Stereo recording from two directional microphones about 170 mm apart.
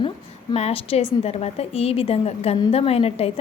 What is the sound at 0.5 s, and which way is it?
A woman's voice, 35° left (ahead or behind).